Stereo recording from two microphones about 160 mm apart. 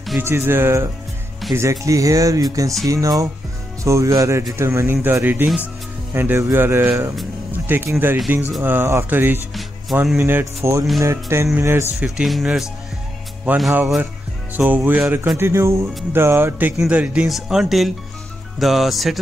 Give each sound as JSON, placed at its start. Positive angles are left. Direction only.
{"t": 0.2, "sound": "speech", "side_deg": -15}
{"t": 9.5, "sound": "music", "side_deg": 0}
{"t": 10.1, "sound": "speech", "side_deg": -15}
{"t": 12.2, "sound": "speech", "side_deg": 0}